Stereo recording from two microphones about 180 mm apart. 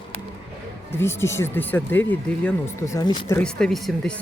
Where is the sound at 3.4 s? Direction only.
5° left (ahead or behind).